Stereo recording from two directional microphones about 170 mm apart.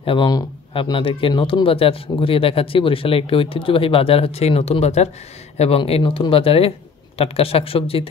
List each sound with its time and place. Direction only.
0.0 s speech: 30° left (ahead or behind)